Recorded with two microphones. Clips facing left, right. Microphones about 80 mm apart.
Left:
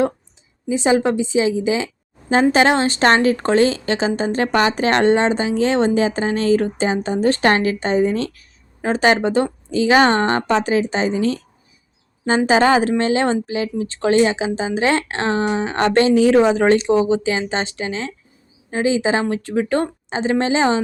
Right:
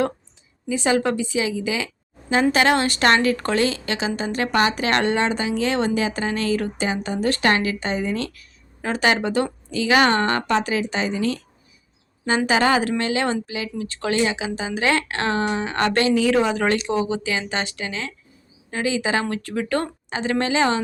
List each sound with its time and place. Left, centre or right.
0.7 s a woman's voice: left
12.5 s a woman's voice: left